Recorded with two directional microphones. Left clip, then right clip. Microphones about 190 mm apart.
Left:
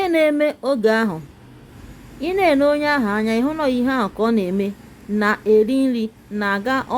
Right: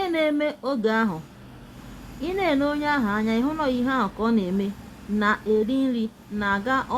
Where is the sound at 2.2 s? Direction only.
35° left (ahead or behind).